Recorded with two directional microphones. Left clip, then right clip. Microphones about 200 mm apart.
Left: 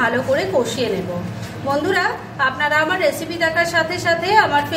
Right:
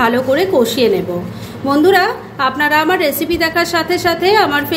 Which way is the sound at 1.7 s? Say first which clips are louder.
Right 7 dB; 45° right (ahead or behind).